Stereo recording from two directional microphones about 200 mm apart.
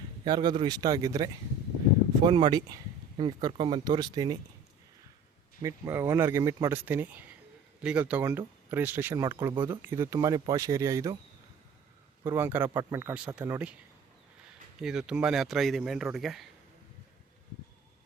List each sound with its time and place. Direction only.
0.3 s speech: 25° right (ahead or behind)
5.6 s speech: 15° right (ahead or behind)
12.2 s speech: 10° right (ahead or behind)
14.8 s speech: 5° right (ahead or behind)